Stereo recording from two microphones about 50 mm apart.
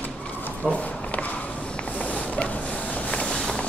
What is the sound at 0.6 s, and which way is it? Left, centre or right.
Walk, left.